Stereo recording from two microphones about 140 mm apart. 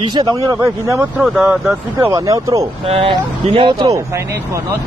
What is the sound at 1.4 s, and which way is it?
Speech, 20° right (ahead or behind).